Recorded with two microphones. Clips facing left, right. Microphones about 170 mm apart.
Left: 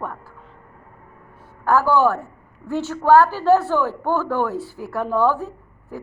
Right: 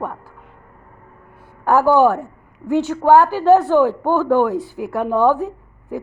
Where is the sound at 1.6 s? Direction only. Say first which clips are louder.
Right 4 dB; 15° right (ahead or behind).